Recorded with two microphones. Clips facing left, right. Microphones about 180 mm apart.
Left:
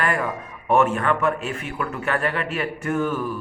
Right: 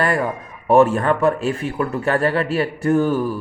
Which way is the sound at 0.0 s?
35° right (ahead or behind).